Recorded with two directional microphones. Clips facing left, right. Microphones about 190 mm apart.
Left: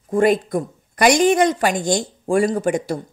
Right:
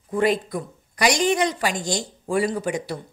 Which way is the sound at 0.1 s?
50° left (ahead or behind).